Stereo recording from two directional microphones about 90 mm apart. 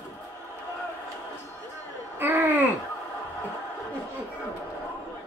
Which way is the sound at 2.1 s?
20° right (ahead or behind).